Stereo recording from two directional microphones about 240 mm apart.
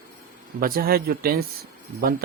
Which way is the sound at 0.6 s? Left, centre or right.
Right.